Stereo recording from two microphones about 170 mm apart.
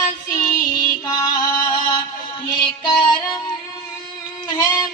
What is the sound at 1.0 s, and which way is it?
Music, 20° left (ahead or behind).